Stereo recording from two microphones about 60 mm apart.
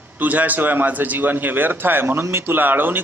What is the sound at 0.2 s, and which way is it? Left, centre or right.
A man's voice, right.